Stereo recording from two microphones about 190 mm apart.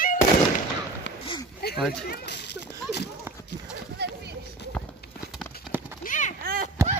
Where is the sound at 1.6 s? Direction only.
55° left (ahead or behind).